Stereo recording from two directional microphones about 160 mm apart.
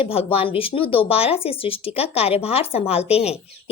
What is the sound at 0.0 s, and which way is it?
Speech, 35° left (ahead or behind).